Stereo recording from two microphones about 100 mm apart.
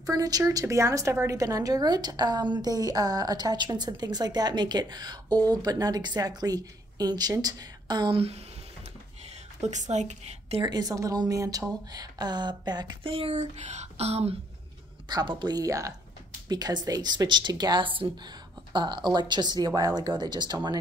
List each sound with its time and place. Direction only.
0.0 s a woman's voice: 40° right (ahead or behind)
9.6 s speech: 90° right
10.6 s a woman's voice: 40° right (ahead or behind)
13.0 s speech: 70° right (ahead or behind); by 14.3 s 90° right
15.0 s speech: 45° right (ahead or behind)